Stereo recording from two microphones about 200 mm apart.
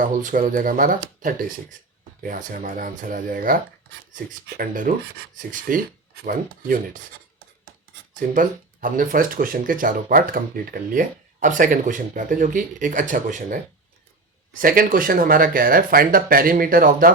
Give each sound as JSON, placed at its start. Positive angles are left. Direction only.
{"t": 0.0, "sound": "speech", "side_deg": -40}
{"t": 8.1, "sound": "speech", "side_deg": -45}